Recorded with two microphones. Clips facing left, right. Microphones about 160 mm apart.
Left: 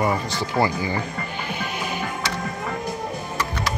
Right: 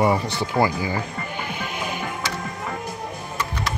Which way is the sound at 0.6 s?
10° right (ahead or behind).